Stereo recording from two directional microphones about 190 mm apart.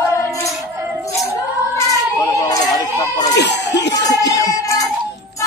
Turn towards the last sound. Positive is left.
turn(degrees=15)  # may be behind; listen again after turning